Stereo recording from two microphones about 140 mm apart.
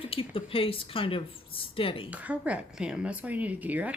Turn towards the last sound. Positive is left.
turn(degrees=-10)  # may be behind; listen again after turning